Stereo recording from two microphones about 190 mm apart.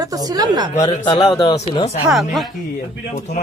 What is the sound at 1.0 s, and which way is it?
Speech, 25° left (ahead or behind).